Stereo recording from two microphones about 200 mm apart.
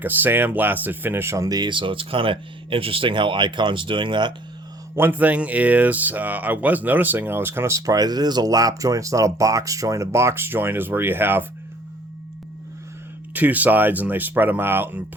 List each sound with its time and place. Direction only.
0.0 s speech: 10° right (ahead or behind)
4.9 s speech: 10° right (ahead or behind)
13.3 s speech: 10° right (ahead or behind)